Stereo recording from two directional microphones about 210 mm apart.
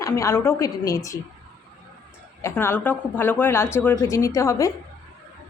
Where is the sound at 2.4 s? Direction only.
10° left (ahead or behind).